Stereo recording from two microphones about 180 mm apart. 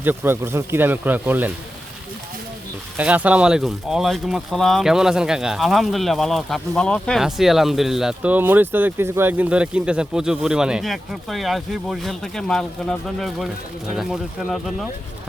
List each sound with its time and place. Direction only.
0.0 s speech: 10° right (ahead or behind)
3.0 s speech: 10° right (ahead or behind)